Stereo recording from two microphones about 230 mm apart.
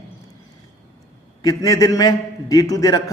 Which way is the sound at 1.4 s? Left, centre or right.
Centre.